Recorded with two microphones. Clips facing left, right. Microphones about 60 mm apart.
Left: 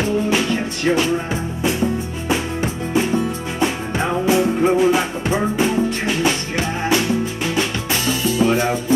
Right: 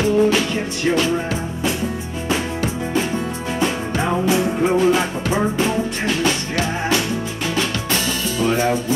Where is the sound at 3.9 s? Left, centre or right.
Centre.